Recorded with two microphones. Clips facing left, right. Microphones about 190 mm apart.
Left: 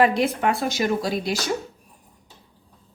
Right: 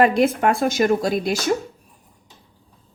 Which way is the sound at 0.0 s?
50° right (ahead or behind).